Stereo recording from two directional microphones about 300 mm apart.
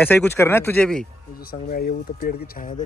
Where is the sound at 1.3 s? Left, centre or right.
Left.